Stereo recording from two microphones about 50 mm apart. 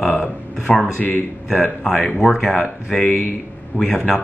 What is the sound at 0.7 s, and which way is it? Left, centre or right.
Speech, left.